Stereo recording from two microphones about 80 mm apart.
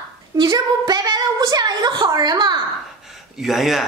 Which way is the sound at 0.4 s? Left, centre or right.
Right.